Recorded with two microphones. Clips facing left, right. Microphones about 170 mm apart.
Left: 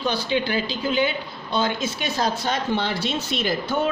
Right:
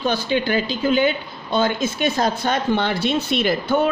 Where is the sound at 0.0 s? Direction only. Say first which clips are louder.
Right 3 dB; 50° right (ahead or behind).